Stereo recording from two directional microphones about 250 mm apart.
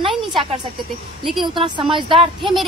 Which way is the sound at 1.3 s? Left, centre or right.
Centre.